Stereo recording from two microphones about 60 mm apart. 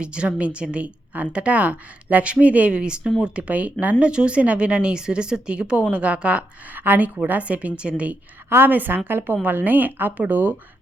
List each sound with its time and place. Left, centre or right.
0.0 s a woman's voice: centre
6.7 s a woman's voice: right
8.4 s speech: right